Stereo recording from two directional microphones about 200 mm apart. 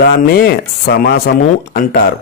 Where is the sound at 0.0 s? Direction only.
50° left (ahead or behind).